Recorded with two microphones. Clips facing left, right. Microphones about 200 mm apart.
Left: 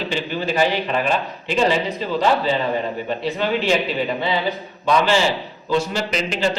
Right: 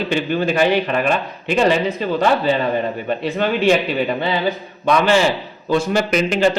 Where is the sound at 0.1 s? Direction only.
55° right (ahead or behind).